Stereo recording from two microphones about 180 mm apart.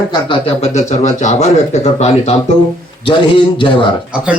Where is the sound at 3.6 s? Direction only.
30° left (ahead or behind).